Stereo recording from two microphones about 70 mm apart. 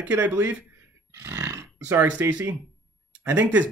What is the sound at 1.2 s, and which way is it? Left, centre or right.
Speech, right.